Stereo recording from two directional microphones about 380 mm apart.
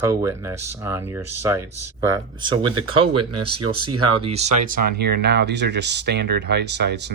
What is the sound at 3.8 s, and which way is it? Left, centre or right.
Speech, right.